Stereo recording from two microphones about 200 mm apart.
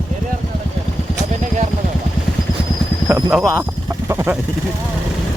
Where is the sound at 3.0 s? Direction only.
10° right (ahead or behind).